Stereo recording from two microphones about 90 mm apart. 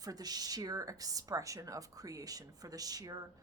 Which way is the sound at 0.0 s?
45° right (ahead or behind).